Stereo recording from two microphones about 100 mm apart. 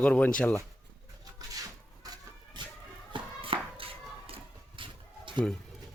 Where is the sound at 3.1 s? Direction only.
65° right (ahead or behind).